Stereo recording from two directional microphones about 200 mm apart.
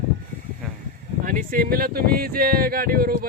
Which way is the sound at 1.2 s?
45° right (ahead or behind).